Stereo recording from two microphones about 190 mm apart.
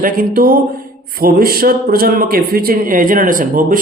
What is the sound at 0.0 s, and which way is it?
Speech, 50° right (ahead or behind).